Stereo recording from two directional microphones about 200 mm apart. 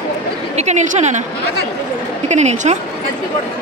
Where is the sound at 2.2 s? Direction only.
35° right (ahead or behind).